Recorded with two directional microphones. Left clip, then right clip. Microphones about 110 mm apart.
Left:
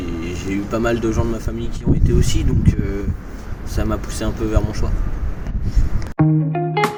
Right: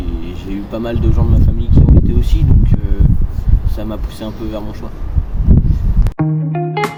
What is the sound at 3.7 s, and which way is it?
Speech, 10° right (ahead or behind).